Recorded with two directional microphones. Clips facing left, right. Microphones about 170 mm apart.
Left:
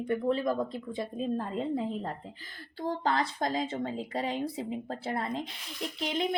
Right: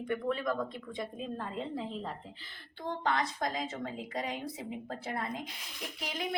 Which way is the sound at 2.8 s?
35° left (ahead or behind).